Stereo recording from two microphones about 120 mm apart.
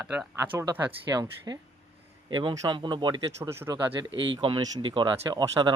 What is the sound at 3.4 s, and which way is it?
Speech, 20° right (ahead or behind).